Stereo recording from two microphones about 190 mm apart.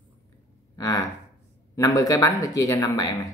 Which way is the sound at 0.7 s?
20° left (ahead or behind).